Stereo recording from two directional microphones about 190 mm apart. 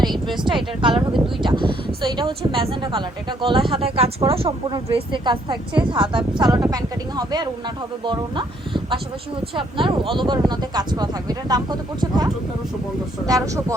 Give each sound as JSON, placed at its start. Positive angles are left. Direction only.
{"t": 0.4, "sound": "a woman's voice", "side_deg": -25}